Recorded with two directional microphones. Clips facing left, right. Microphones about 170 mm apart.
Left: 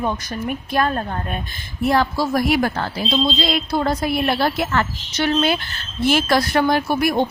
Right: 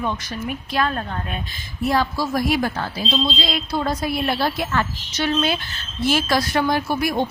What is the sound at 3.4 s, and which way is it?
Speech, 50° left (ahead or behind).